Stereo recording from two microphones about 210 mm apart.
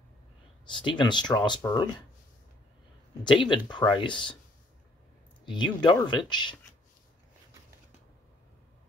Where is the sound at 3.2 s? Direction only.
20° left (ahead or behind).